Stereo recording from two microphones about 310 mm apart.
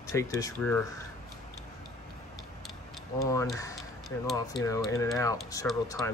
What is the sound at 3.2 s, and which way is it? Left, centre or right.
Speech, centre.